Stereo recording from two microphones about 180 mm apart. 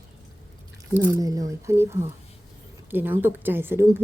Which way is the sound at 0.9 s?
15° right (ahead or behind).